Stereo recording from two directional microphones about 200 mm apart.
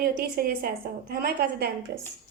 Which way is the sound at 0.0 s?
50° right (ahead or behind).